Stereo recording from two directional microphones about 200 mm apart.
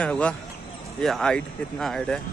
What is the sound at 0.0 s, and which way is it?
A man's voice, 5° left (ahead or behind).